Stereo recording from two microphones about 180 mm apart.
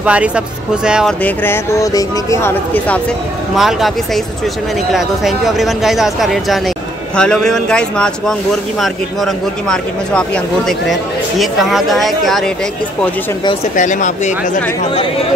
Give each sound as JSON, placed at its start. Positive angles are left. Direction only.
{"t": 0.0, "sound": "speech", "side_deg": -5}
{"t": 1.2, "sound": "speech", "side_deg": 15}
{"t": 3.5, "sound": "speech", "side_deg": 0}
{"t": 13.7, "sound": "speech", "side_deg": 45}